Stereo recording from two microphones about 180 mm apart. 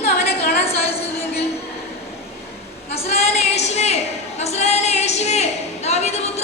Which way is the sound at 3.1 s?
35° left (ahead or behind).